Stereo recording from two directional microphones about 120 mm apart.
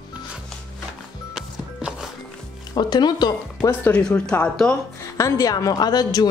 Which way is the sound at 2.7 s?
35° left (ahead or behind).